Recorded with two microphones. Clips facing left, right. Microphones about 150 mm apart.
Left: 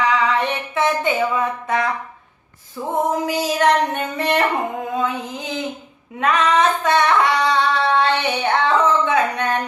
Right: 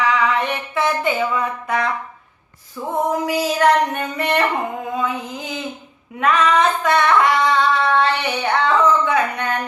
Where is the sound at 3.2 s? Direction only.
20° left (ahead or behind).